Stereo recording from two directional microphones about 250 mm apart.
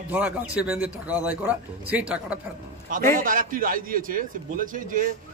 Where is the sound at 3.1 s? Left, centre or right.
Right.